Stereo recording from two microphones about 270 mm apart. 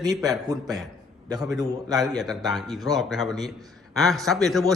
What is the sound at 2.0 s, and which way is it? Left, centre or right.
A man's voice, centre.